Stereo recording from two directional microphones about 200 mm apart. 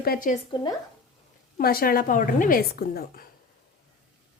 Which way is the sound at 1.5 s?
45° left (ahead or behind).